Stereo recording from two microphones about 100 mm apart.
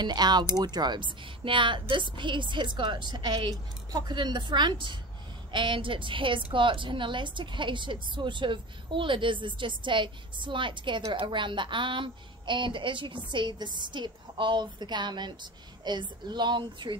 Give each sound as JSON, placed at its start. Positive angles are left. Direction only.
{"t": 0.0, "sound": "a woman's voice", "side_deg": -45}